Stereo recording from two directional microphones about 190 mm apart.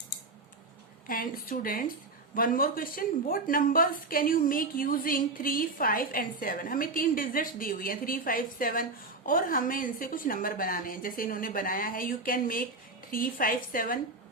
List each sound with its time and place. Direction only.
1.0 s speech: 45° left (ahead or behind)